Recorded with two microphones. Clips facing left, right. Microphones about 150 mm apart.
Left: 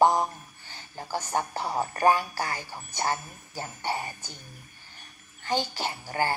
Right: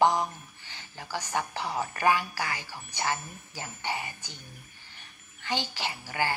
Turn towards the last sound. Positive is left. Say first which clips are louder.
# left 2 dB
turn(degrees=45)  # may be behind; listen again after turning